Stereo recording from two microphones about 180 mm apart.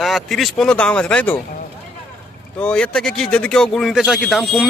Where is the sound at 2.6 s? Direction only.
5° left (ahead or behind).